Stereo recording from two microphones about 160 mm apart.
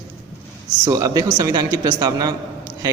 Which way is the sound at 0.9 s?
20° right (ahead or behind).